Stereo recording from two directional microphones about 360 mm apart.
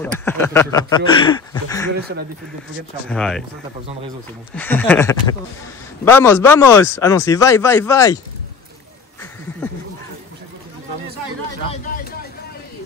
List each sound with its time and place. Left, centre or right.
0.0 s speech: centre
2.0 s speech: right
3.1 s speech: centre
4.6 s speech: centre